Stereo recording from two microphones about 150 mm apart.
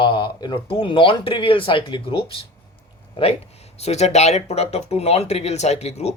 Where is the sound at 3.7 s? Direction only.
45° left (ahead or behind).